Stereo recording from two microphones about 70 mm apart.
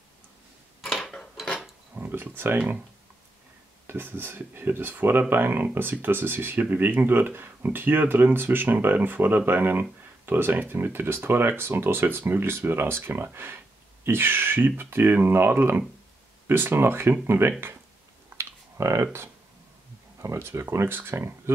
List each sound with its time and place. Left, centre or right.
0.8 s mechanisms: centre
2.0 s speech: right
3.8 s speech: right
18.4 s clicking: right
20.2 s speech: right